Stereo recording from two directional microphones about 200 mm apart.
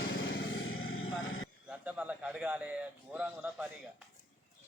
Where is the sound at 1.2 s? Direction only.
90° left.